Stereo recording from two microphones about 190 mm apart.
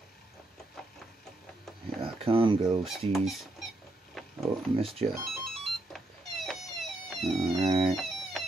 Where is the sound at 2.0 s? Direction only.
30° right (ahead or behind).